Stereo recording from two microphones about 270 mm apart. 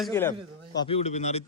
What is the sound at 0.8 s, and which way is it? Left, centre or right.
Speech, left.